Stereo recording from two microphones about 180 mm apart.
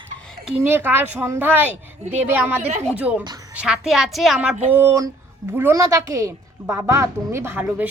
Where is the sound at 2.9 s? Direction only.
5° right (ahead or behind).